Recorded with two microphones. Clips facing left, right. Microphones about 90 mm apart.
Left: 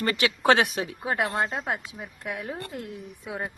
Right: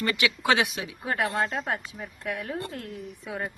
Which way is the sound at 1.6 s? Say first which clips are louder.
Even; 10° left (ahead or behind).